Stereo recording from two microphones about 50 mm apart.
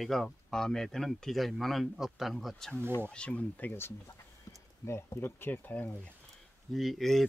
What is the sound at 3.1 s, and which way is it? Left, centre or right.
Speech, left.